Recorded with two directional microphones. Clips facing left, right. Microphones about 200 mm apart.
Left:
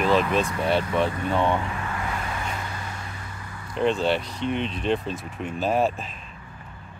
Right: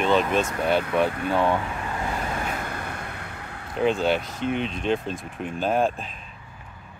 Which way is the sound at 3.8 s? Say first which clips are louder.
Even; centre (ahead or behind).